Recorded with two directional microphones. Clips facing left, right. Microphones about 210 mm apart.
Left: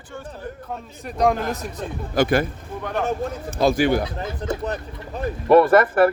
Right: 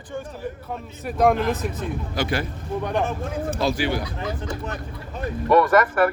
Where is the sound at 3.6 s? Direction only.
50° left (ahead or behind).